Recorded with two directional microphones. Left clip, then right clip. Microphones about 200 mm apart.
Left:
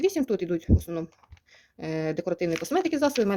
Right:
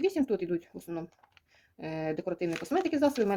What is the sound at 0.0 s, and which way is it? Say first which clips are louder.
Speech: left 4 dB; 35° left (ahead or behind).